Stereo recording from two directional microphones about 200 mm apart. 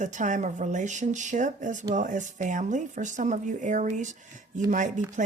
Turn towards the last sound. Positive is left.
turn(degrees=-40)  # may be behind; listen again after turning